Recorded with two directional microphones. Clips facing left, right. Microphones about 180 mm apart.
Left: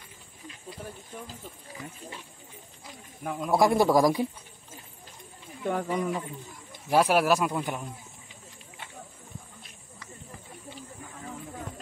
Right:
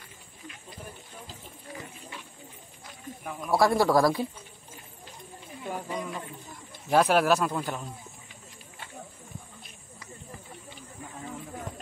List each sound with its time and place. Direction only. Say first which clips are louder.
2.9 s speech: left 3 dB; 20° left (ahead or behind)
5.7 s speech: left 6 dB; 70° left (ahead or behind)
6.9 s speech: even; 10° left (ahead or behind)